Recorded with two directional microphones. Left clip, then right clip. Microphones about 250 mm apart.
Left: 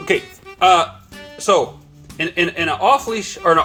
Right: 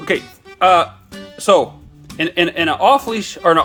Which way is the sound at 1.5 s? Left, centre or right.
Right.